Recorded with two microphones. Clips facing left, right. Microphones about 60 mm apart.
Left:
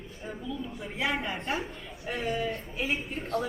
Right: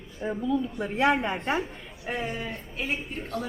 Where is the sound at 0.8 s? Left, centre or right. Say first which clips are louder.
Right 8 dB; right.